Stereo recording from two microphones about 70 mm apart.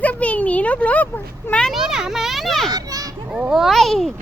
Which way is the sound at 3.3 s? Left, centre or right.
Right.